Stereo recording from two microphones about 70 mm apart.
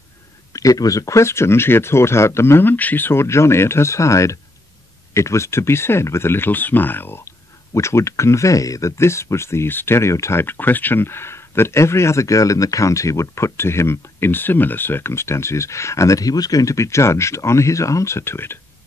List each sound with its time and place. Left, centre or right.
0.5 s speech: left
10.4 s speech: left